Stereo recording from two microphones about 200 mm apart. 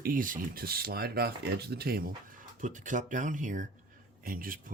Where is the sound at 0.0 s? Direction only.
45° right (ahead or behind).